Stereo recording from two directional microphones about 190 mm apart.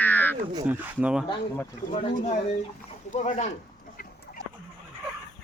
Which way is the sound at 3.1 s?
35° left (ahead or behind).